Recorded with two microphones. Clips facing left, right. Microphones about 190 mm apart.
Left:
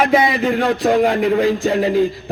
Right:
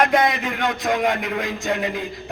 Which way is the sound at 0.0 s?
5° left (ahead or behind).